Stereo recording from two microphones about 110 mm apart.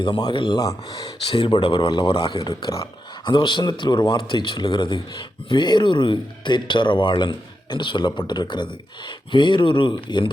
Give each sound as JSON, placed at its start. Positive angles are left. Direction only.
{"t": 0.0, "sound": "speech", "side_deg": 45}
{"t": 0.6, "sound": "speech", "side_deg": 35}
{"t": 1.4, "sound": "speech", "side_deg": 45}